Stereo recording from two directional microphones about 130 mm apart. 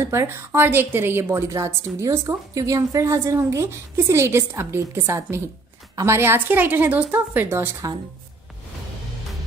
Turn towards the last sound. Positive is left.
turn(degrees=-20)  # may be behind; listen again after turning